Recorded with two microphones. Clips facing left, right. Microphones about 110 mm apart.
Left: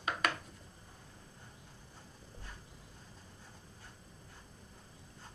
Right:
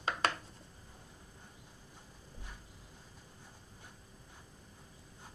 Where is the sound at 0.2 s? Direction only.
30° right (ahead or behind).